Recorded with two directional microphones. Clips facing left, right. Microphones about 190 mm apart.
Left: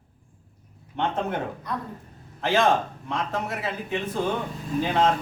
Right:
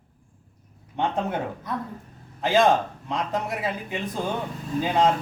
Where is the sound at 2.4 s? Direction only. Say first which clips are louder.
Right 2 dB; 15° right (ahead or behind).